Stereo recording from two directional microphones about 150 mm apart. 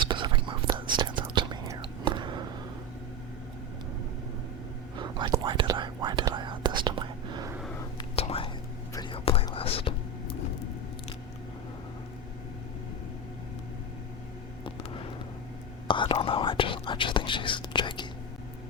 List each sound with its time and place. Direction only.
0.0 s whispering: 30° right (ahead or behind)
4.9 s whispering: 30° right (ahead or behind)
8.1 s whispering: 40° left (ahead or behind)
9.6 s a sound: 40° left (ahead or behind)
15.9 s whispering: 35° left (ahead or behind)